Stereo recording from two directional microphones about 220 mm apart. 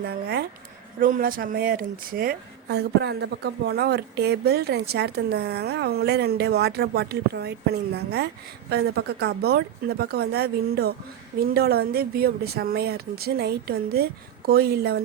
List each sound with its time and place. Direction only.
0.0 s speech: 45° right (ahead or behind)